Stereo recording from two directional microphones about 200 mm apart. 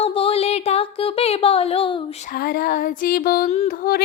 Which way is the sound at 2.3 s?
50° left (ahead or behind).